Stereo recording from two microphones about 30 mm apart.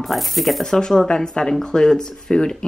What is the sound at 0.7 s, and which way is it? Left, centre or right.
Speech, left.